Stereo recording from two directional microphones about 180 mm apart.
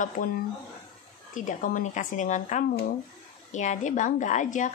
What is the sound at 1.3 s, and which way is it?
Speech, 45° left (ahead or behind).